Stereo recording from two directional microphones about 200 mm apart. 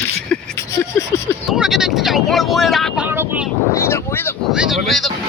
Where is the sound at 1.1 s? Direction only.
15° left (ahead or behind).